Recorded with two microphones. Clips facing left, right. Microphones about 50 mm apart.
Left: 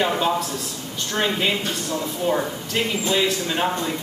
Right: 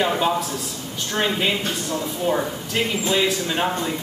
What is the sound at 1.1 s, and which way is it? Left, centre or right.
Speech, centre.